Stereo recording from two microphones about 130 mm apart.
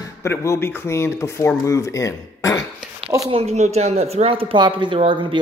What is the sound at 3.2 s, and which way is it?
Speech, 50° right (ahead or behind).